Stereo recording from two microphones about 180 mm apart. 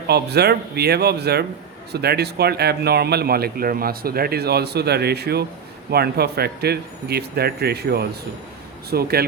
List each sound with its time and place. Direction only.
0.1 s speech: 65° right (ahead or behind)